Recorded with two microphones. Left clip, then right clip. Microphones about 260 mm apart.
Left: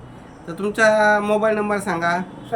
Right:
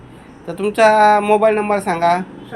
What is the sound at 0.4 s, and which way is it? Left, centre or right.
Speech, centre.